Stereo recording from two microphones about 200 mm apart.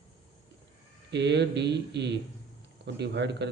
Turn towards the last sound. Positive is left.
turn(degrees=-60)  # may be behind; listen again after turning